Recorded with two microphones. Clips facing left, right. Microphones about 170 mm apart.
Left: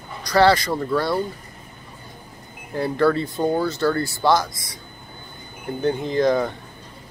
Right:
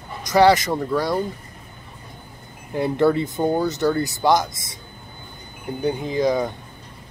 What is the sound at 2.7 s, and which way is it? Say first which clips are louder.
Speech: right 1 dB; 20° right (ahead or behind).